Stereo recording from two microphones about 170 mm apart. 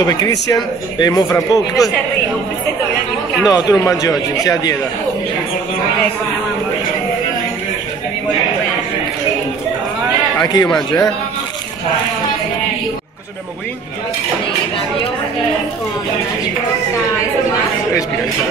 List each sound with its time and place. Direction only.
0.0 s speech: 20° left (ahead or behind)
3.4 s speech: 20° left (ahead or behind)
10.4 s speech: 25° left (ahead or behind)